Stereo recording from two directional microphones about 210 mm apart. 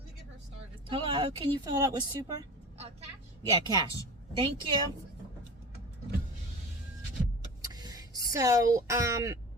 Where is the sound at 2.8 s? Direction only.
30° right (ahead or behind).